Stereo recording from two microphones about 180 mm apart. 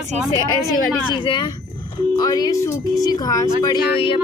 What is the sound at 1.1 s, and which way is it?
Speech, 25° left (ahead or behind).